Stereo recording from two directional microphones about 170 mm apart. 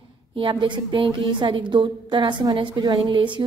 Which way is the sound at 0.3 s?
30° right (ahead or behind).